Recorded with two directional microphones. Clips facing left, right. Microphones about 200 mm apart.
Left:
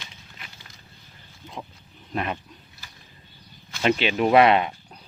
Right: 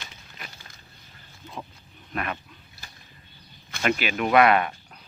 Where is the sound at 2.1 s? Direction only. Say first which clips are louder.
Left 3 dB; 25° left (ahead or behind).